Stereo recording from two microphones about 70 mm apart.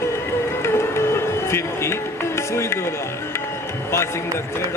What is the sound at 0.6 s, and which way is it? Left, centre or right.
Music, left.